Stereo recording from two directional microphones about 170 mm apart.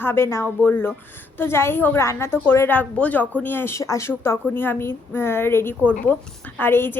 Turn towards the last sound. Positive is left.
turn(degrees=10)  # may be behind; listen again after turning